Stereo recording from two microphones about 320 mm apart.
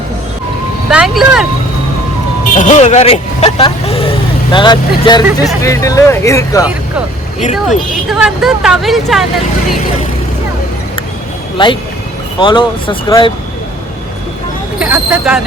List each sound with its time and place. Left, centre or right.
0.9 s speech: centre
2.6 s speech: left
7.5 s speech: centre
11.5 s speech: centre
14.8 s speech: centre